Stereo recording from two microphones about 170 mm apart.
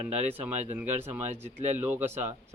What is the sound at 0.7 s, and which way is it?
Speech, 10° right (ahead or behind).